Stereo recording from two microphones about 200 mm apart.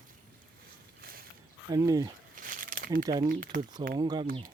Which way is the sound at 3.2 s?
45° right (ahead or behind).